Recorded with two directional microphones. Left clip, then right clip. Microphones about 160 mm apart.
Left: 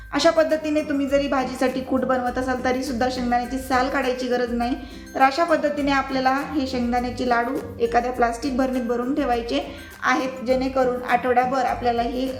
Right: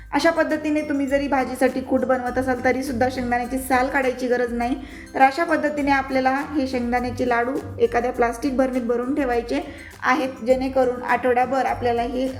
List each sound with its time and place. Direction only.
0.1 s a woman's voice: 10° right (ahead or behind)